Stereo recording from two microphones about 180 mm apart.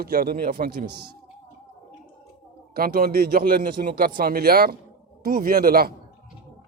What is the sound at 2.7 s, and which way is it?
A man's voice, 55° right (ahead or behind).